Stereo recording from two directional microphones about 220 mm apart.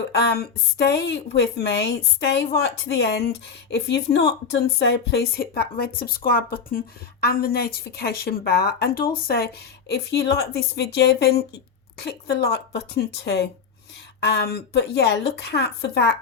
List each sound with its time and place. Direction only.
0.1 s a woman's voice: 50° left (ahead or behind)